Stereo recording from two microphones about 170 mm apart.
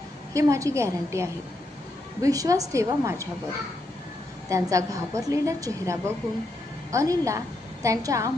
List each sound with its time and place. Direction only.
0.3 s a woman's voice: 20° right (ahead or behind)
4.4 s a woman's voice: 20° right (ahead or behind)